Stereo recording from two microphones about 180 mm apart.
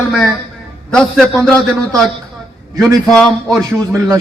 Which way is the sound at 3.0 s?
5° left (ahead or behind).